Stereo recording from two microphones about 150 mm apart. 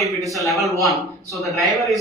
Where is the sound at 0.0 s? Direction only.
Centre (ahead or behind).